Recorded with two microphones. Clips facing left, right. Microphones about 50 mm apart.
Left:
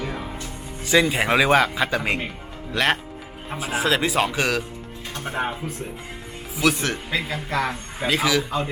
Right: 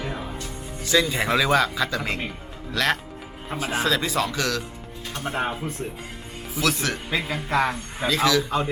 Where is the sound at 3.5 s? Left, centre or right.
Centre.